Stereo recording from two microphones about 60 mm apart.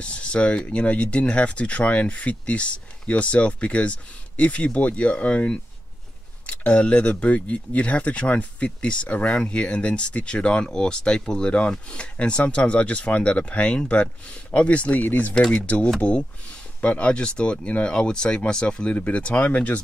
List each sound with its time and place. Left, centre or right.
0.0 s speech: centre